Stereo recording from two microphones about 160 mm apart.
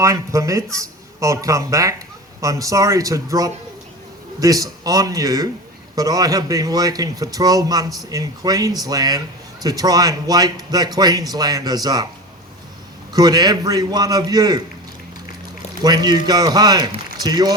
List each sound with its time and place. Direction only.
0.0 s a man's voice: 20° right (ahead or behind)
13.1 s a man's voice: 25° right (ahead or behind)
15.8 s a man's voice: 25° right (ahead or behind)